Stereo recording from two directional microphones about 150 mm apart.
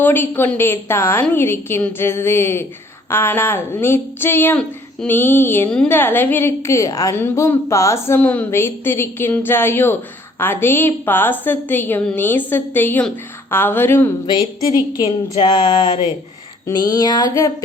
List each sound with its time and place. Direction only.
0.0 s a woman's voice: 15° left (ahead or behind)
14.9 s speech: 30° left (ahead or behind)